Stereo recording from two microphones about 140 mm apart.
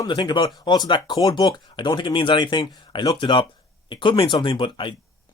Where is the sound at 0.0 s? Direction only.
30° left (ahead or behind).